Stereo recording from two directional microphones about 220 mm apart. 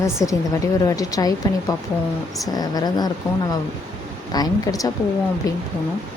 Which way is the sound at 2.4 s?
15° left (ahead or behind).